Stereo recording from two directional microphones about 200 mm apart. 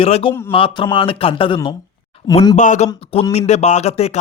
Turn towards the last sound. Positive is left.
turn(degrees=30)  # may be behind; listen again after turning